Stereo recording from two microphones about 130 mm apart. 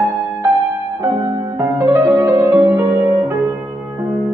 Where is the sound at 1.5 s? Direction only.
15° right (ahead or behind).